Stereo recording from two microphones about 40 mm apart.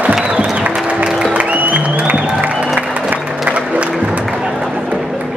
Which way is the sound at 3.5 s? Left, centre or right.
Right.